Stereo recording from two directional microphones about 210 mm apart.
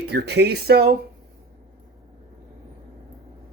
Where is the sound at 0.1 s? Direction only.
50° right (ahead or behind).